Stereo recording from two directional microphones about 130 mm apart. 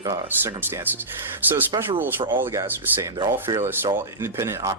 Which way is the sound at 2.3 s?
15° right (ahead or behind).